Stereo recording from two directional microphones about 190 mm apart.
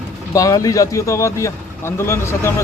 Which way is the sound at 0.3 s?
20° left (ahead or behind).